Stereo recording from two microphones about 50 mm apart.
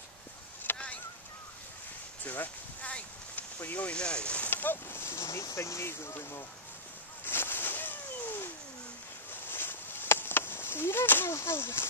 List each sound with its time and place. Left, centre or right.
0.7 s fowl: left
2.2 s speech: left
2.8 s a sound: left
3.9 s speech: centre
4.5 s speech: left
7.2 s a sound: left
11.4 s speech: left